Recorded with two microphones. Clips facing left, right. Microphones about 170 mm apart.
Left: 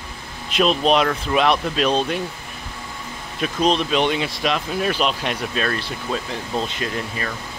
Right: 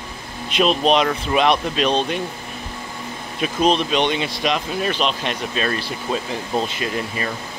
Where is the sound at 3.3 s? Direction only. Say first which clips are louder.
Right 1 dB; 5° right (ahead or behind).